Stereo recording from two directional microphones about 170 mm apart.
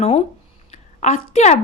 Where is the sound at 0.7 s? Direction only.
45° left (ahead or behind).